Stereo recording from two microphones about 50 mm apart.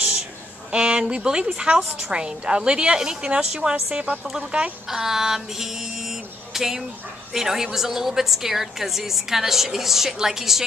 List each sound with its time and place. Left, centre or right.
0.7 s a woman's voice: centre
4.8 s a sound: centre
7.3 s a woman's voice: centre